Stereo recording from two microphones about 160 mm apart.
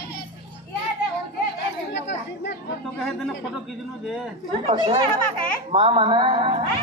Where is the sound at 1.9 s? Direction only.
90° left.